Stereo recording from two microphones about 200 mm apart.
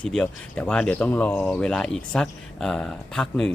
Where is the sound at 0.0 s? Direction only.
5° left (ahead or behind).